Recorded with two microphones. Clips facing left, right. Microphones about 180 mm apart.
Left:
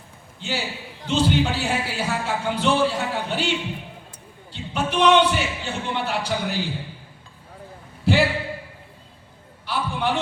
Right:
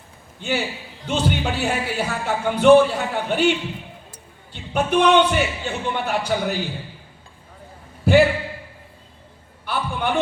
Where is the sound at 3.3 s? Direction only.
55° right (ahead or behind).